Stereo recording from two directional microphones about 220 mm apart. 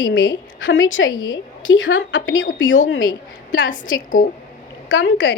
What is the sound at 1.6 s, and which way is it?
Speech, 60° left (ahead or behind).